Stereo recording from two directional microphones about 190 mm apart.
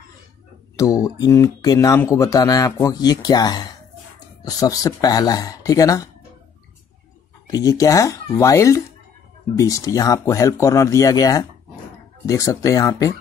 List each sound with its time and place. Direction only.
0.7 s speech: 20° left (ahead or behind)
7.4 s speech: 20° left (ahead or behind)